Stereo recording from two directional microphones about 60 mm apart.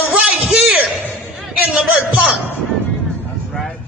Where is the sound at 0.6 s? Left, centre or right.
Right.